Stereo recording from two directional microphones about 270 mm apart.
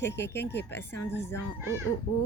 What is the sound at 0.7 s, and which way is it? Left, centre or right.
Speech, centre.